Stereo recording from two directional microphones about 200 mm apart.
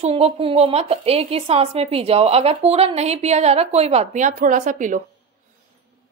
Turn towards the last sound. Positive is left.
turn(degrees=-40)  # may be behind; listen again after turning